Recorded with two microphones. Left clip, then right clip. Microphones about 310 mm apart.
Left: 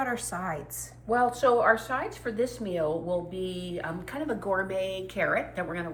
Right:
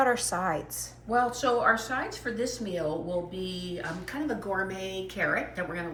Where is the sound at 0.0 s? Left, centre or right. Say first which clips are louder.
Right 5 dB; centre.